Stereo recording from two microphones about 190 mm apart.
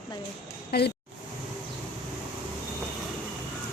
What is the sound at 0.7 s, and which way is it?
Speech, 60° left (ahead or behind).